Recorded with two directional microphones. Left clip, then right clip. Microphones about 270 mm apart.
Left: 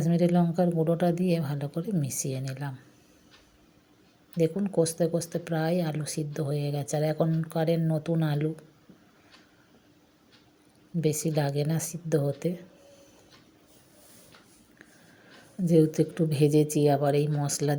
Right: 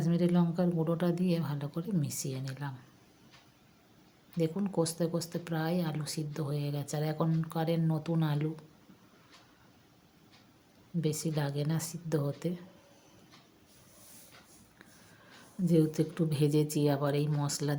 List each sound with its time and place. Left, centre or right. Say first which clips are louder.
0.0 s speech: left 5 dB; centre
4.4 s speech: left 6 dB; centre
11.0 s speech: left 7 dB; centre
15.6 s speech: left 6 dB; centre